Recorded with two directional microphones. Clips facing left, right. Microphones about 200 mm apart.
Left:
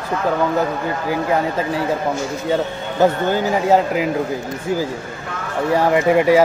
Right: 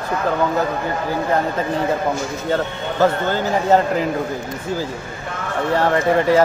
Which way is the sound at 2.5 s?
15° left (ahead or behind).